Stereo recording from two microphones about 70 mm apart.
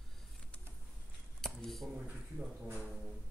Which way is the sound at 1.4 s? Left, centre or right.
Centre.